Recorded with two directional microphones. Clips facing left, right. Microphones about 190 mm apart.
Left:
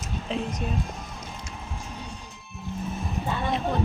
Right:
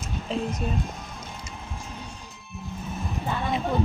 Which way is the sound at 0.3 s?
Centre (ahead or behind).